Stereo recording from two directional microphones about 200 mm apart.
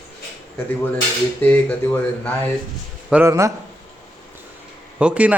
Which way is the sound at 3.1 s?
10° right (ahead or behind).